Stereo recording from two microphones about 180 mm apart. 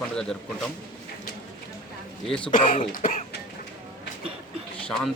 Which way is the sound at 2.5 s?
45° left (ahead or behind).